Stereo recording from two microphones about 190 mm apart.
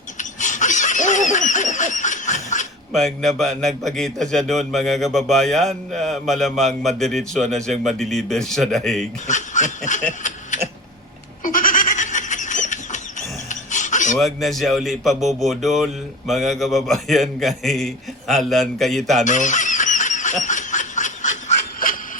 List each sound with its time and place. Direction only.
0.2 s laughter: 40° left (ahead or behind)
2.9 s speech: centre (ahead or behind)
9.2 s snicker: 40° left (ahead or behind)
11.4 s a sound: 45° left (ahead or behind)
14.2 s speech: centre (ahead or behind)
19.2 s honk: 40° left (ahead or behind)